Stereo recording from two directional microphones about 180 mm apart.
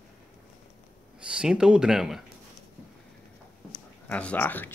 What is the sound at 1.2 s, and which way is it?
Speech, 5° right (ahead or behind).